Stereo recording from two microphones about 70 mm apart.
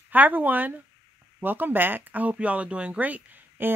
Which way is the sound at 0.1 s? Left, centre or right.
Right.